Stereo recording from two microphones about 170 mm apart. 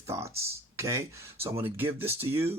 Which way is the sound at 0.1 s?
15° right (ahead or behind).